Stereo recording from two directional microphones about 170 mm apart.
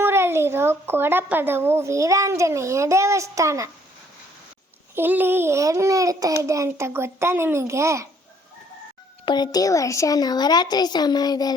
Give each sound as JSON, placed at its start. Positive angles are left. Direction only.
{"t": 0.0, "sound": "a woman's voice", "side_deg": -15}
{"t": 4.9, "sound": "a woman's voice", "side_deg": -10}
{"t": 9.2, "sound": "a woman's voice", "side_deg": 25}